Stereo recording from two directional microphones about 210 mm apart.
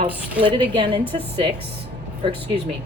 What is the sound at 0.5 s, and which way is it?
Speech, 25° right (ahead or behind).